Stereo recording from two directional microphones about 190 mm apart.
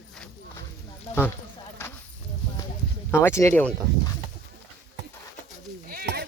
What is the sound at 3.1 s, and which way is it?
Speech, 15° left (ahead or behind).